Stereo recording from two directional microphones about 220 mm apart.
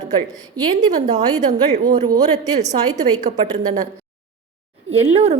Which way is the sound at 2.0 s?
15° right (ahead or behind).